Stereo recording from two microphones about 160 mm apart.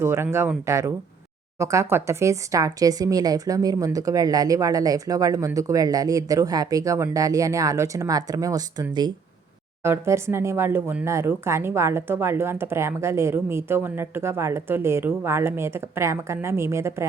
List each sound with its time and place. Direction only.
0.0 s speech: 15° right (ahead or behind)